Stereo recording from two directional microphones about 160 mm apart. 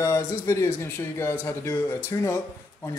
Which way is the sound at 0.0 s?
20° left (ahead or behind).